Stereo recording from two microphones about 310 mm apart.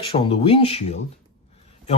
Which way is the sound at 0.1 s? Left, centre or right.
Centre.